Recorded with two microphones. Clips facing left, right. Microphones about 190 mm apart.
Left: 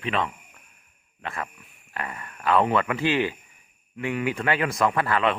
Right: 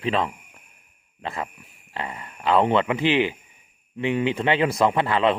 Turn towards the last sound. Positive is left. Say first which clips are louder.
# right 3 dB
turn(degrees=-25)  # may be behind; listen again after turning